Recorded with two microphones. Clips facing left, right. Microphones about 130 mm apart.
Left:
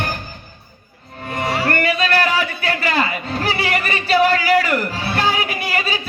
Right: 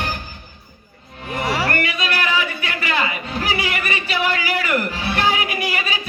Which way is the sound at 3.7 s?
35° left (ahead or behind).